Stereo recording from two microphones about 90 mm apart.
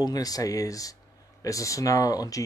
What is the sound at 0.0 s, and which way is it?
Speech, 45° left (ahead or behind).